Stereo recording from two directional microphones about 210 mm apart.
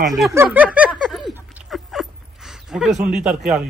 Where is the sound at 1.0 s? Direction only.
Centre (ahead or behind).